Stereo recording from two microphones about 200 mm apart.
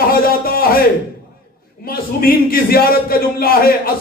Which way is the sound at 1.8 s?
45° left (ahead or behind).